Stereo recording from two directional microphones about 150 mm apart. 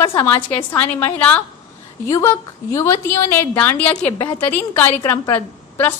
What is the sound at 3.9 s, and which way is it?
Speech, 25° left (ahead or behind).